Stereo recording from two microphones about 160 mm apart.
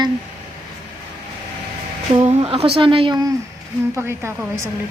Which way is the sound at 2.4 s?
35° right (ahead or behind).